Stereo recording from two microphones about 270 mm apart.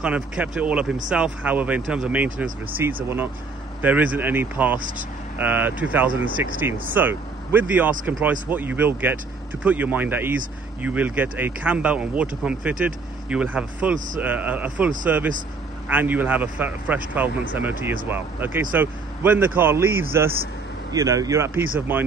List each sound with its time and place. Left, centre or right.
0.0 s speech: centre
4.7 s speech: right
5.4 s speech: centre